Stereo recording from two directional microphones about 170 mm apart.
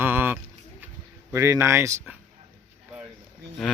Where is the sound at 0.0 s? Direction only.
10° right (ahead or behind).